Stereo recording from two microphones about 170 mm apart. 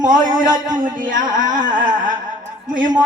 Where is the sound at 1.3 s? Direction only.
50° right (ahead or behind).